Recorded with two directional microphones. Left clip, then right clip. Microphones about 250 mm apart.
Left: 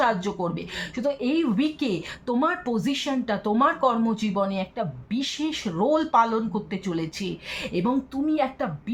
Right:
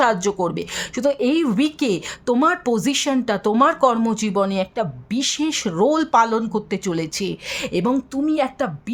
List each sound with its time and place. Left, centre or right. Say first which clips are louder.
0.0 s speech: right 6 dB; right